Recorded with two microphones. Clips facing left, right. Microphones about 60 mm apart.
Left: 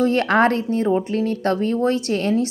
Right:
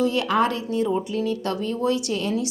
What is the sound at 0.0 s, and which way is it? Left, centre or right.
A woman's voice, left.